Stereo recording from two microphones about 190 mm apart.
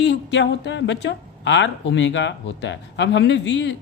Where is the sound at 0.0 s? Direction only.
70° left (ahead or behind).